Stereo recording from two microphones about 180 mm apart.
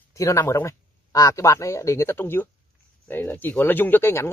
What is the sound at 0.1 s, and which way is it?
Speech, 15° left (ahead or behind).